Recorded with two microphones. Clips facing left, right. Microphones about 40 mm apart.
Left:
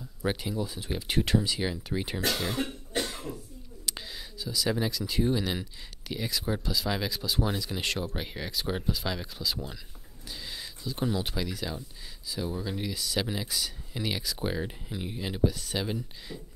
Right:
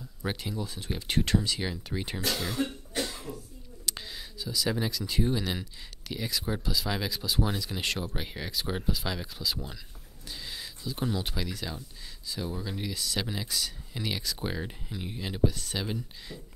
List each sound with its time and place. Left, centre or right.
0.2 s speech: centre
2.2 s speech: centre
2.5 s cough: left
3.8 s speech: centre
10.2 s a sound: centre
12.3 s speech: centre